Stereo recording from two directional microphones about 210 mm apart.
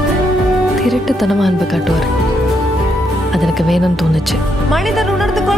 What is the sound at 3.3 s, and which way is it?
Speech, centre (ahead or behind).